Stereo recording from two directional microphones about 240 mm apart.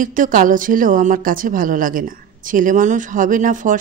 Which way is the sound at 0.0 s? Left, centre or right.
Right.